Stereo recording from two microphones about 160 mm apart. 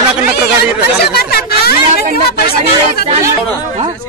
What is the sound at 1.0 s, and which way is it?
Speech, 75° left (ahead or behind).